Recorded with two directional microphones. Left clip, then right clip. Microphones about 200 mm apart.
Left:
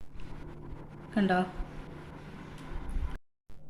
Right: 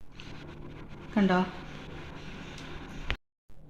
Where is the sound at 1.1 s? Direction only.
25° right (ahead or behind).